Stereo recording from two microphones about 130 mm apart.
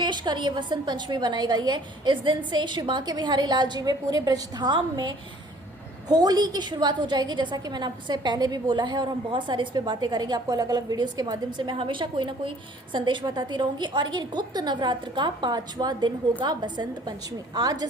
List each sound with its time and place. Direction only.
0.0 s a woman's voice: 35° right (ahead or behind)